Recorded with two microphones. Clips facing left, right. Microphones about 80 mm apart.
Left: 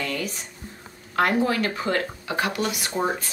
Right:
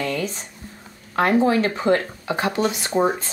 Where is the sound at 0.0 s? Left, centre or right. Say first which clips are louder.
Right 4 dB; right.